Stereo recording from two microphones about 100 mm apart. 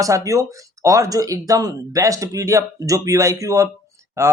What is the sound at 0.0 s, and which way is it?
Speech, 35° right (ahead or behind).